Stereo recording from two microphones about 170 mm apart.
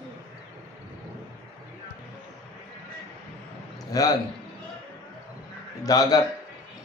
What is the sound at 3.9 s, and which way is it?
Speech, 20° left (ahead or behind).